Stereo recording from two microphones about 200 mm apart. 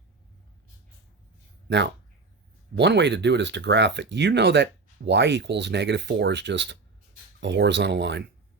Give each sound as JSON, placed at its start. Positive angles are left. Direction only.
{"t": 1.6, "sound": "speech", "side_deg": -60}